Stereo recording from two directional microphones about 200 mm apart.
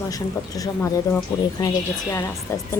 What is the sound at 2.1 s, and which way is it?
Speech, 15° left (ahead or behind).